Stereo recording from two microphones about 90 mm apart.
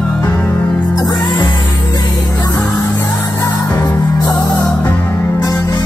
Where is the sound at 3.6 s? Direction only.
35° left (ahead or behind).